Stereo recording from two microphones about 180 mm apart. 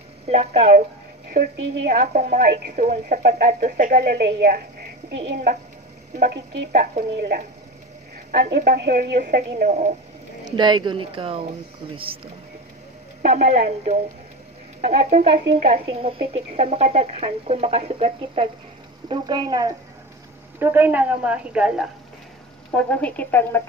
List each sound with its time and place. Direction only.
0.3 s speech: 40° right (ahead or behind)
1.3 s a woman's voice: 50° right (ahead or behind)
8.3 s speech: 65° right (ahead or behind)
9.2 s a woman's voice: 50° right (ahead or behind)
10.5 s speech: 25° right (ahead or behind)
13.2 s speech: 45° right (ahead or behind)
19.0 s a woman's voice: 25° right (ahead or behind); by 21.8 s 5° right (ahead or behind)
22.8 s speech: 10° left (ahead or behind)